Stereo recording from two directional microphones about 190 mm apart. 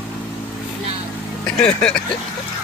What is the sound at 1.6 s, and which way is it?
Music, 5° left (ahead or behind).